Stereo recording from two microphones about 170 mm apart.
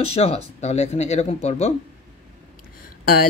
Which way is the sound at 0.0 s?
35° left (ahead or behind).